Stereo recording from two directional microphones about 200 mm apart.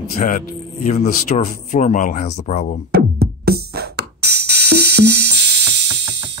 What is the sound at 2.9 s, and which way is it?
Music, 50° right (ahead or behind).